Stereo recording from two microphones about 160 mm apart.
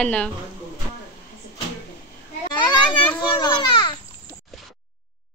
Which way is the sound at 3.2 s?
30° left (ahead or behind).